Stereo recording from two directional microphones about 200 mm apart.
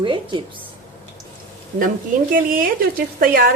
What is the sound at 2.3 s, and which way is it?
A woman's voice, 45° right (ahead or behind).